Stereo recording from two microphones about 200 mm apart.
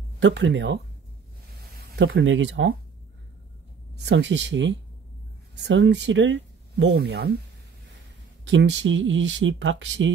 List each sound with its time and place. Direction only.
0.2 s speech: 65° right (ahead or behind)
2.0 s speech: 65° right (ahead or behind)
4.0 s speech: 60° right (ahead or behind)
8.5 s speech: 65° right (ahead or behind)